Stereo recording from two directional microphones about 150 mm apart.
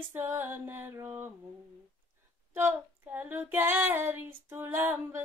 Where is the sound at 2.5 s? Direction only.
15° right (ahead or behind).